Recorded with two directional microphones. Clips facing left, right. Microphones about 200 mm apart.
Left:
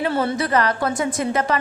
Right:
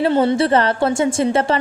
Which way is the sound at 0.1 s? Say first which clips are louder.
Right 6 dB; 25° right (ahead or behind).